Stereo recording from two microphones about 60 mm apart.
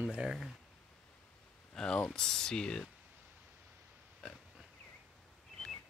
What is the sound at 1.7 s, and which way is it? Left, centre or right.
Speech, centre.